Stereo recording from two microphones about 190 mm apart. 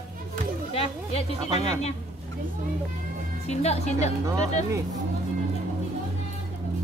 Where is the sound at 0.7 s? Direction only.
30° left (ahead or behind).